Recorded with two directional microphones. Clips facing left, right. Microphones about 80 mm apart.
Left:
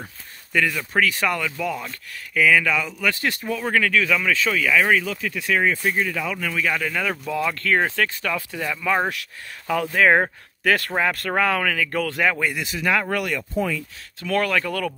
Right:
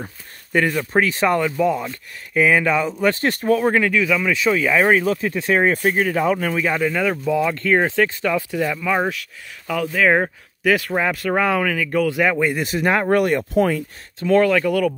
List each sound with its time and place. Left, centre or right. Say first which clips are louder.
0.5 s speech: right 4 dB; right
3.6 s speech: right 4 dB; right
3.9 s speech: right 2 dB; centre
4.6 s speech: right 2 dB; right
5.9 s speech: right 6 dB; right
6.8 s speech: right 5 dB; centre
12.5 s speech: right 4 dB; right
13.4 s speech: right 7 dB; right
14.2 s speech: right 7 dB; centre